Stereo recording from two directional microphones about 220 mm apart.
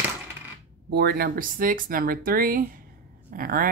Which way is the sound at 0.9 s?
45° right (ahead or behind).